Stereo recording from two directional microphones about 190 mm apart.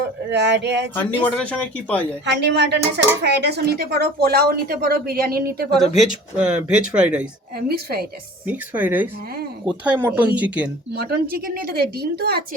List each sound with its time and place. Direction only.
0.3 s a woman's voice: 65° right (ahead or behind)
0.9 s speech: 5° left (ahead or behind)
2.2 s a woman's voice: 65° right (ahead or behind)
6.0 s speech: 5° right (ahead or behind)
7.7 s a woman's voice: 55° right (ahead or behind)
8.4 s a woman's voice: 10° right (ahead or behind)
10.9 s a woman's voice: 55° right (ahead or behind)